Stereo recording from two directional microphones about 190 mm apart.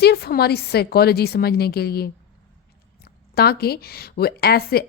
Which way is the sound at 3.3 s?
55° left (ahead or behind).